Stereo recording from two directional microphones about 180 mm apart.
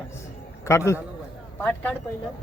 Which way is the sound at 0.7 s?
15° left (ahead or behind).